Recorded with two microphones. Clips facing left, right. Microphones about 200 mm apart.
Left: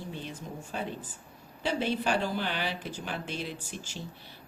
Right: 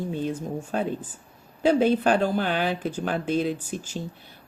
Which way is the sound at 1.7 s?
50° right (ahead or behind).